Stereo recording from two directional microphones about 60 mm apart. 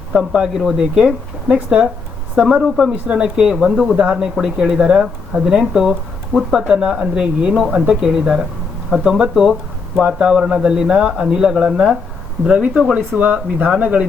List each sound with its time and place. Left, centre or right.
0.1 s speech: centre
10.0 s speech: centre